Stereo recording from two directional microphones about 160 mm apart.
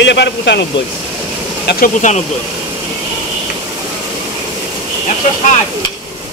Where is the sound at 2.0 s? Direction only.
50° left (ahead or behind).